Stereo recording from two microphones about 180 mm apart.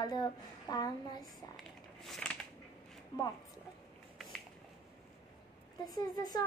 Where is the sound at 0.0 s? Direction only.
20° left (ahead or behind).